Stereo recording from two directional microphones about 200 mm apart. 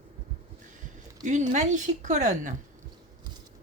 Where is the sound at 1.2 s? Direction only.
40° right (ahead or behind).